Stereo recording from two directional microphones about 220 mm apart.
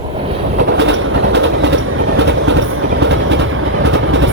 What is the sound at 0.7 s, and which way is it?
Train, 55° right (ahead or behind).